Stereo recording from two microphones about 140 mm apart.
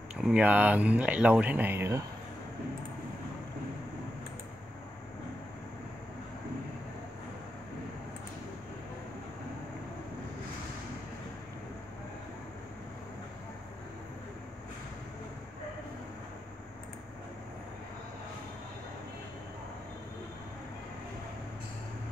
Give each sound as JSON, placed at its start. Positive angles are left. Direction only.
{"t": 0.1, "sound": "speech", "side_deg": -5}